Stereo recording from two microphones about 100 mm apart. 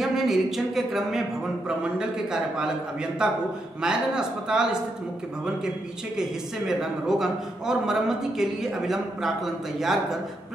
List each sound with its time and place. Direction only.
0.0 s a sound: centre (ahead or behind)
1.8 s a man's voice: 5° right (ahead or behind)
6.7 s a man's voice: 5° right (ahead or behind)